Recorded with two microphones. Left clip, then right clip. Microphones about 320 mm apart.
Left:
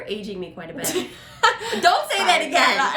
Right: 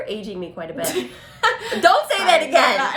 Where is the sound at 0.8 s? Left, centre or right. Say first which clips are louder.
Even; centre.